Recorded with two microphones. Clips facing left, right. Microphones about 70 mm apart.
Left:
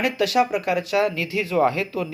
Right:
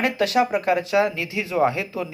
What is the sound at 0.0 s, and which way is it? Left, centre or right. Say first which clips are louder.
Speech: even; right.